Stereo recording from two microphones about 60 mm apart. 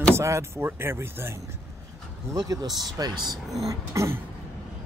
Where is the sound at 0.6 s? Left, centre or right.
Right.